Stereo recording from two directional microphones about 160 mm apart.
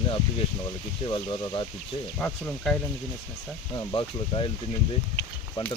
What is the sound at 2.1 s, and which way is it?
Speech, 5° left (ahead or behind).